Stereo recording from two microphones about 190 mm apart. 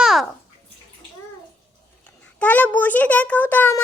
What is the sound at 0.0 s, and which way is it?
Bathtub, centre (ahead or behind).